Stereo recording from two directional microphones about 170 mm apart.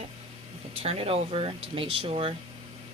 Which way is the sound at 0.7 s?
35° right (ahead or behind).